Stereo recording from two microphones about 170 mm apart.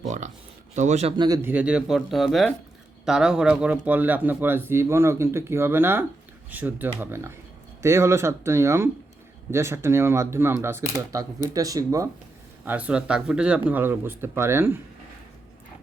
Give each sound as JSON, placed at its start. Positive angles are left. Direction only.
{"t": 0.8, "sound": "speech", "side_deg": -40}
{"t": 1.1, "sound": "speech", "side_deg": -25}
{"t": 1.4, "sound": "speech", "side_deg": -10}
{"t": 12.6, "sound": "speech", "side_deg": -10}